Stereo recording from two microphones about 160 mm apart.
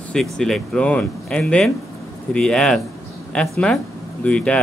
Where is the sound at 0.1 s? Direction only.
5° left (ahead or behind).